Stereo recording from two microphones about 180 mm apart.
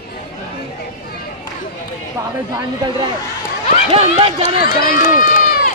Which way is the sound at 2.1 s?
25° right (ahead or behind).